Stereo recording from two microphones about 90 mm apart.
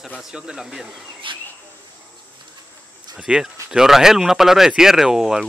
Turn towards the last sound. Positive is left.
turn(degrees=-5)  # may be behind; listen again after turning